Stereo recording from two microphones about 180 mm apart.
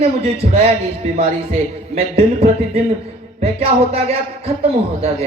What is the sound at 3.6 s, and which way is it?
Speech, 35° right (ahead or behind).